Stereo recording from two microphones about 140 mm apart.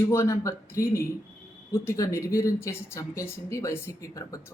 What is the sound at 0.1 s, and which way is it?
A man's voice, 20° left (ahead or behind).